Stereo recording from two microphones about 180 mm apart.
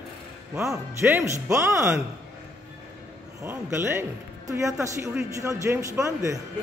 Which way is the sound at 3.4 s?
10° right (ahead or behind).